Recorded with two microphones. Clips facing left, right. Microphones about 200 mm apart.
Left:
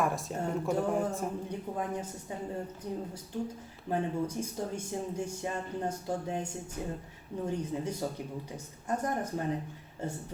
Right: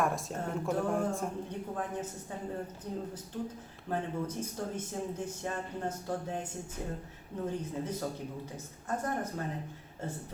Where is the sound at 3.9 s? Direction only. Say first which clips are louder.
Left 3 dB; 10° left (ahead or behind).